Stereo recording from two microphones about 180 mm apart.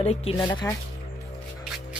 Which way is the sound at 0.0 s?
35° left (ahead or behind).